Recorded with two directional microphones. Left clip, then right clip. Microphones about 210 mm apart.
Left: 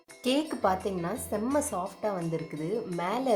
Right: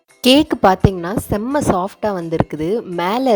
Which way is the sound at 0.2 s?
45° right (ahead or behind).